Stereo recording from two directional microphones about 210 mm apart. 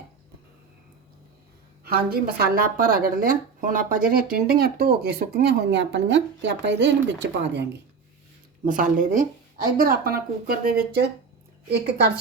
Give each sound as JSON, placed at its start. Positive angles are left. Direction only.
{"t": 1.8, "sound": "speech", "side_deg": -45}
{"t": 8.6, "sound": "speech", "side_deg": -40}